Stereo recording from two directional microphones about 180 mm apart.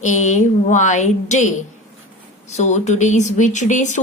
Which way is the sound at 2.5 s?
40° left (ahead or behind).